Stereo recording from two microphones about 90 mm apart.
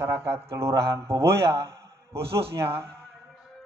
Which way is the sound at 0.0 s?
30° right (ahead or behind).